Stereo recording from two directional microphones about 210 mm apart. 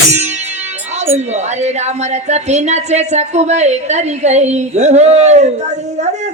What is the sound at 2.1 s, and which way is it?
Speech, 30° right (ahead or behind).